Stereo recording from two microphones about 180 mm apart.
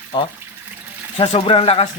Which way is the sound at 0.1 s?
25° left (ahead or behind).